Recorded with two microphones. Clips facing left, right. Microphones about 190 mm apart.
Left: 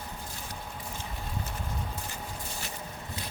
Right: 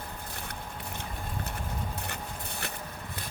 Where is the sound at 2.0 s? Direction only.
60° right (ahead or behind).